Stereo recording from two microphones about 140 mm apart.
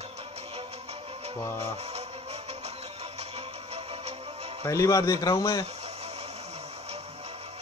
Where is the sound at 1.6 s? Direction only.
50° right (ahead or behind).